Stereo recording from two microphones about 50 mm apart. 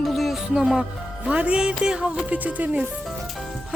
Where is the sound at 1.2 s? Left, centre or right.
Right.